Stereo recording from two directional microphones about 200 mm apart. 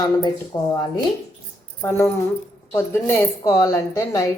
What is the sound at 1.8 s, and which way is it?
A woman's voice, 10° left (ahead or behind).